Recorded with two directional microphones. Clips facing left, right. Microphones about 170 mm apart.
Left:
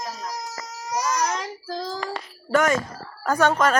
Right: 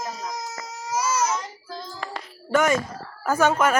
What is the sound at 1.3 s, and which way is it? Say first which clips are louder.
Child singing: left 1 dB; 90° left.